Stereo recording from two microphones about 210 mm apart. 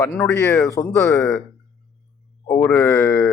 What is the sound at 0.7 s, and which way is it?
Speech, 15° left (ahead or behind).